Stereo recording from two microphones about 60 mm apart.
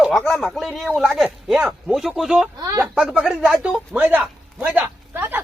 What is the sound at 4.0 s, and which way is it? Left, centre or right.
Speech, right.